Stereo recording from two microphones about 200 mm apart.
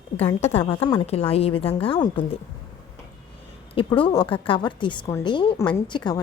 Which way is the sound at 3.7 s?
25° left (ahead or behind).